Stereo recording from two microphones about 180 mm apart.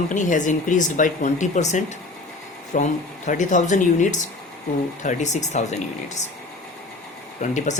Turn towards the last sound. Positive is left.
turn(degrees=45)  # may be behind; listen again after turning